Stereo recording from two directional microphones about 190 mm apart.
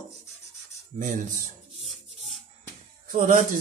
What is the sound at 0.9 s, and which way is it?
Speech, 40° right (ahead or behind).